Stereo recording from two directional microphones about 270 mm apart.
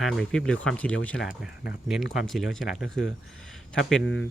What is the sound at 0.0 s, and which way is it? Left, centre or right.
Speech, centre.